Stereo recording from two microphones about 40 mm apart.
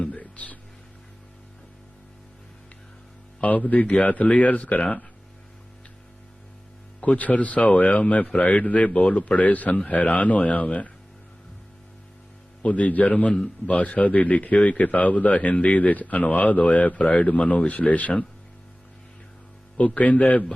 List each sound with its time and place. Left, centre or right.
0.0 s music: left
3.4 s speech: left
7.0 s speech: left
12.6 s speech: left
20.0 s speech: left